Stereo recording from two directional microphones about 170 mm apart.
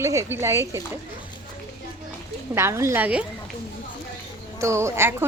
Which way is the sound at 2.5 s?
15° right (ahead or behind).